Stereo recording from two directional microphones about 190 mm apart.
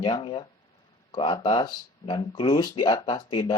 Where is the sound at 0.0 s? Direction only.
25° left (ahead or behind).